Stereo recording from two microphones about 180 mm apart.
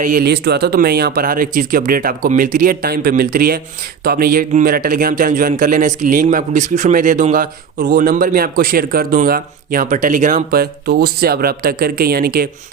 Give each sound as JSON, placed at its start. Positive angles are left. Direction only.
{"t": 0.0, "sound": "speech", "side_deg": -55}